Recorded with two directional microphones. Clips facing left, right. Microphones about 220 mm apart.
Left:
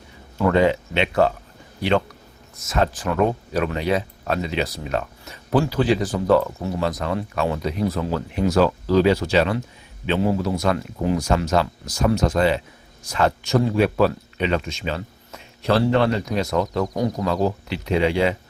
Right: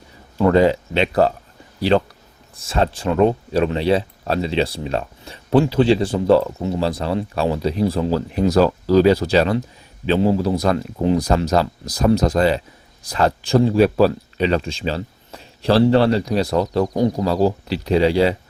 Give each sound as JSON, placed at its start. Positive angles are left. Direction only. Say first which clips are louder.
{"t": 0.3, "sound": "speech", "louder": "right 3 dB", "side_deg": -35}